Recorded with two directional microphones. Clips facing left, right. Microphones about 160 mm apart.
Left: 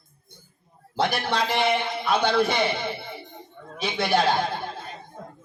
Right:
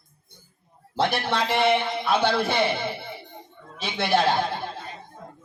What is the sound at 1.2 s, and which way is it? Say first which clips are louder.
A man's voice: right 1 dB; centre (ahead or behind).